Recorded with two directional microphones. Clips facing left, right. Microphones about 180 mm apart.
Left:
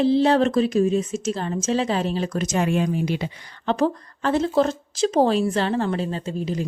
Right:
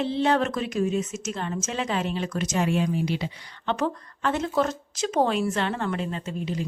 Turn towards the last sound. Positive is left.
turn(degrees=35)  # may be behind; listen again after turning